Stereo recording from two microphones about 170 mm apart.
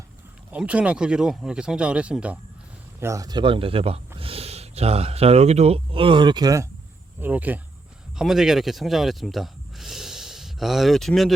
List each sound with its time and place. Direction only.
0.5 s speech: 5° right (ahead or behind)
3.0 s speech: 20° right (ahead or behind)
7.2 s speech: 10° right (ahead or behind)